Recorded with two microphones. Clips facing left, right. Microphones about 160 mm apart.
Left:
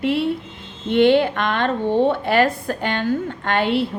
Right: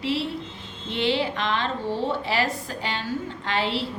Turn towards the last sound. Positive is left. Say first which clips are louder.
# left 7 dB
turn(degrees=55)  # may be behind; listen again after turning